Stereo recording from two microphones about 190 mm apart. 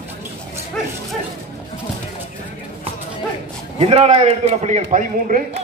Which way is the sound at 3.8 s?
30° right (ahead or behind).